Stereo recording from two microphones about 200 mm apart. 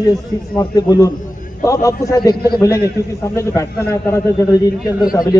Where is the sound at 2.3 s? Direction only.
50° left (ahead or behind).